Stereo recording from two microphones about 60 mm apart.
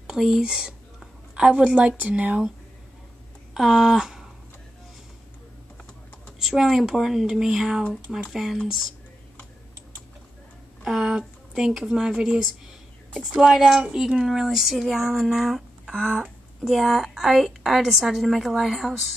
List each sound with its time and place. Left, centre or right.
0.0 s a woman's voice: centre
3.5 s speech: centre
6.4 s speech: centre
10.8 s a woman's voice: centre
15.9 s a woman's voice: right
16.6 s a woman's voice: centre